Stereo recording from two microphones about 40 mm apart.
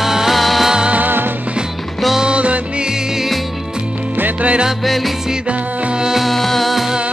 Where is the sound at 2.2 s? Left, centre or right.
Right.